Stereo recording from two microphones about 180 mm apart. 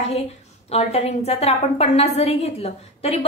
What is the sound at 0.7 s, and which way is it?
A woman's voice, 35° left (ahead or behind).